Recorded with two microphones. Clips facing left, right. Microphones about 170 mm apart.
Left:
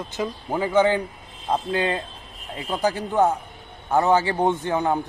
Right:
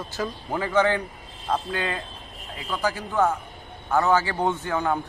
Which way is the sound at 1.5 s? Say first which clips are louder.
Left 4 dB; 25° left (ahead or behind).